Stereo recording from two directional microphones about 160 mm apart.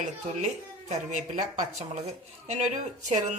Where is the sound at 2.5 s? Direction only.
45° right (ahead or behind).